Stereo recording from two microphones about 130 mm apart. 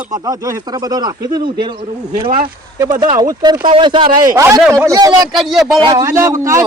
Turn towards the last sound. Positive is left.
turn(degrees=-25)  # may be behind; listen again after turning